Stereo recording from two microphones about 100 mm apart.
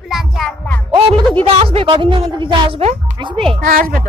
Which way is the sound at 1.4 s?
65° right (ahead or behind).